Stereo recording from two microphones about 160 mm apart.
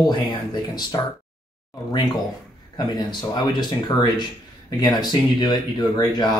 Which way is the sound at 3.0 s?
25° left (ahead or behind).